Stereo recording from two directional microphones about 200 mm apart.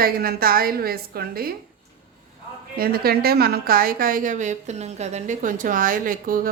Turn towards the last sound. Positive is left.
turn(degrees=-45)  # may be behind; listen again after turning